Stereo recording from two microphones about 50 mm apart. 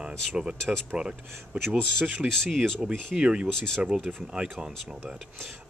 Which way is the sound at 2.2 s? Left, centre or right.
Right.